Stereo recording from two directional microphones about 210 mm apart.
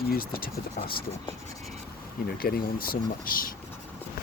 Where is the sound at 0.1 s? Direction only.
45° left (ahead or behind).